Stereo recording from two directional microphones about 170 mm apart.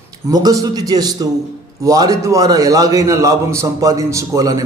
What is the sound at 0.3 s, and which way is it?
A man's voice, 20° right (ahead or behind).